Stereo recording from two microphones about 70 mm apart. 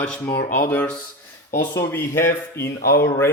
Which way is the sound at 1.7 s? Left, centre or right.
Left.